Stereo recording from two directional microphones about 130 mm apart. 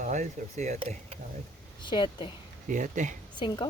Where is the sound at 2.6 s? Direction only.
85° right.